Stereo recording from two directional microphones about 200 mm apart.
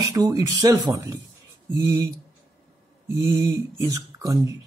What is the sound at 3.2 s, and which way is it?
Speech, 15° right (ahead or behind).